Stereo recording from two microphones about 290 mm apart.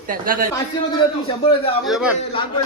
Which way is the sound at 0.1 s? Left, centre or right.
Right.